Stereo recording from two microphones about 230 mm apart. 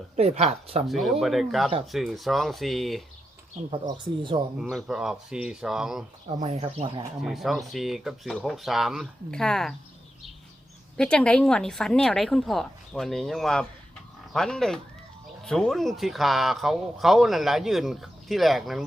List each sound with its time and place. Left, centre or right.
0.2 s speech: right
0.9 s speech: centre
3.7 s speech: right
4.6 s speech: centre
6.2 s speech: right
7.2 s speech: centre
10.9 s speech: centre